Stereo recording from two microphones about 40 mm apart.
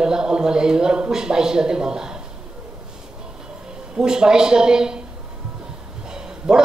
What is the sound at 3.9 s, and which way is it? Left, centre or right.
Speech, centre.